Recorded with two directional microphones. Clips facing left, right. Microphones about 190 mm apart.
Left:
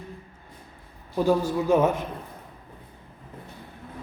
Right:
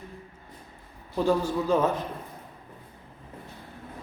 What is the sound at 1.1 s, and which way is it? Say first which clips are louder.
Speech: left 2 dB; 10° left (ahead or behind).